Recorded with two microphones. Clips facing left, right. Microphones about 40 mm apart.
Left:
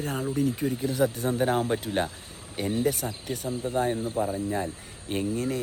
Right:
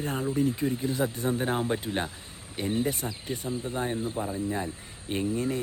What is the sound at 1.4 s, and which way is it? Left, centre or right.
Speech, centre.